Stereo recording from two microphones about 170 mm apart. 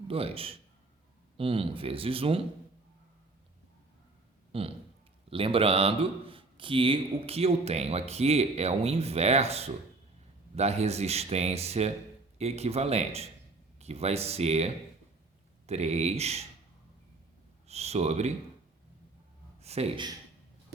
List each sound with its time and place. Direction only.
0.1 s speech: 35° right (ahead or behind)
4.5 s speech: 35° right (ahead or behind)
17.7 s speech: 40° right (ahead or behind)
19.6 s speech: 35° right (ahead or behind)